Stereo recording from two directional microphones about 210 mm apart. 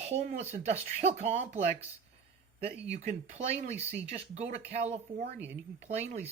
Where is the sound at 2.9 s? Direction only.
35° right (ahead or behind).